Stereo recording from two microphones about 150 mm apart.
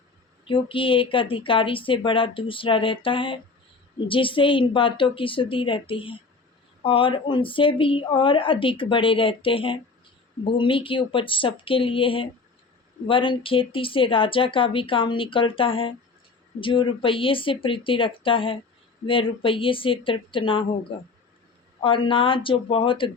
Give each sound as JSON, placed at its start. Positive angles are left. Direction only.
{"t": 0.4, "sound": "speech", "side_deg": 35}
{"t": 21.8, "sound": "speech", "side_deg": 35}